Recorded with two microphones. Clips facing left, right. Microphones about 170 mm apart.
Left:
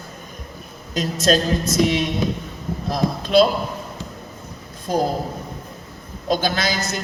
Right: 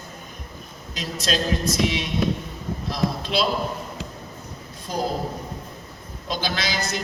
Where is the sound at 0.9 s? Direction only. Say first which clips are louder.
Left 8 dB; 45° left (ahead or behind).